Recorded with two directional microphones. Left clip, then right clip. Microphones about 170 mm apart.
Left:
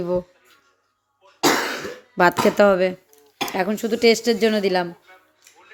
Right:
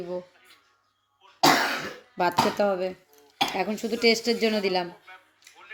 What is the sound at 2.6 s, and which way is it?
Speech, 55° left (ahead or behind).